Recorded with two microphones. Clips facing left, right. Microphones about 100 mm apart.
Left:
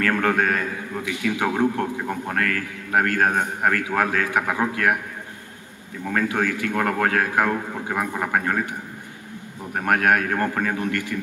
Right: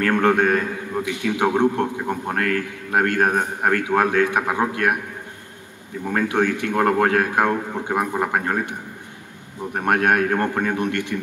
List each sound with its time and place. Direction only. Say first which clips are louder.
0.0 s a man's voice: right 3 dB; 30° right (ahead or behind)
6.0 s a man's voice: right 3 dB; 30° right (ahead or behind)
8.3 s a man's voice: even; 30° right (ahead or behind)
9.8 s a man's voice: right 1 dB; 30° right (ahead or behind)